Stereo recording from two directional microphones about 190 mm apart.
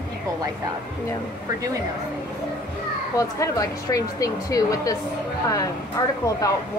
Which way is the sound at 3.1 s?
15° left (ahead or behind).